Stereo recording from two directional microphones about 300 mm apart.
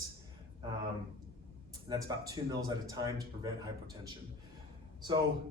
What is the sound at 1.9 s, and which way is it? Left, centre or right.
A man's voice, centre.